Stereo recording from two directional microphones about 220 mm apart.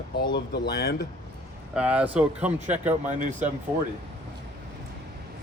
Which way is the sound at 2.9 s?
35° right (ahead or behind).